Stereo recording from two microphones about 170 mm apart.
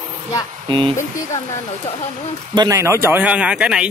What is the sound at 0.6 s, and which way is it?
Speech, 30° right (ahead or behind).